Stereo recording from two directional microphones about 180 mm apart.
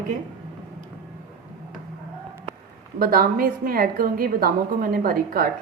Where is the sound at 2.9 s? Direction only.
55° right (ahead or behind).